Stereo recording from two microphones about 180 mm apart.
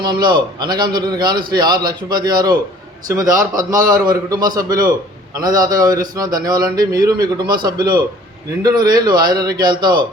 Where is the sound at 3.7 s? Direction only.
50° right (ahead or behind).